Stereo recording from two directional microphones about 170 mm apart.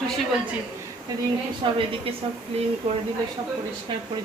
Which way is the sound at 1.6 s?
30° right (ahead or behind).